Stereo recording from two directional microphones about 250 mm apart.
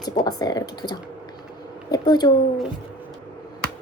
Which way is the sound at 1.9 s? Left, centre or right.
Centre.